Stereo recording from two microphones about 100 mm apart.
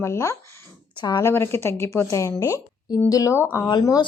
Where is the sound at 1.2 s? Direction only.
25° left (ahead or behind).